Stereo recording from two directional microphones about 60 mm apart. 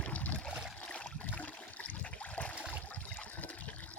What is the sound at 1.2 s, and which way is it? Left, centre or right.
Toilet flush, left.